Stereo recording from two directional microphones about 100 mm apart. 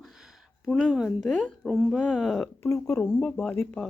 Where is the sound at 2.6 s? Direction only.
30° left (ahead or behind).